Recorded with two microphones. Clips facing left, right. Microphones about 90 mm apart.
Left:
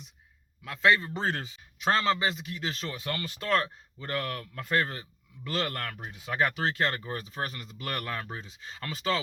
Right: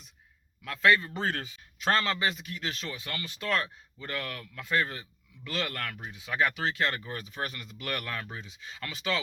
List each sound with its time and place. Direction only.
0.6 s a man's voice: 20° left (ahead or behind)
2.9 s speech: 40° left (ahead or behind)